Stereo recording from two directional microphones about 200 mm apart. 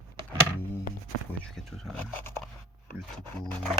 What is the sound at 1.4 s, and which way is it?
Speech, centre (ahead or behind).